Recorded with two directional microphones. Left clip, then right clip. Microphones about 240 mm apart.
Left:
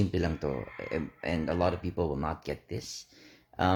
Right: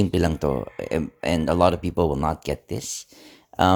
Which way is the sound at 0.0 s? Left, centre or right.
Right.